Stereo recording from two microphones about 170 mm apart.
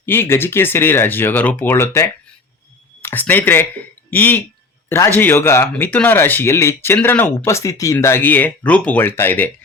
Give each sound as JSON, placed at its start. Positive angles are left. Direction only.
{"t": 0.0, "sound": "speech", "side_deg": 15}